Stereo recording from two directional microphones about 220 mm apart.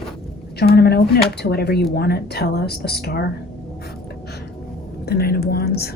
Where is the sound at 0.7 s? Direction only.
45° left (ahead or behind).